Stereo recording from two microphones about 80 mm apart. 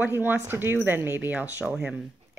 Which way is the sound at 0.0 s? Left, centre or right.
Right.